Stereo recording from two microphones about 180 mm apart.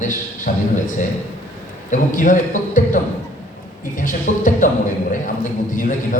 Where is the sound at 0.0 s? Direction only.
45° left (ahead or behind).